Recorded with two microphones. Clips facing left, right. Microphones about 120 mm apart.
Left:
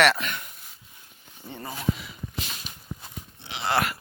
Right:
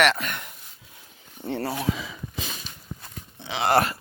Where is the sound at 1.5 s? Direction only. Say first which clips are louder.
Right 4 dB; 70° right (ahead or behind).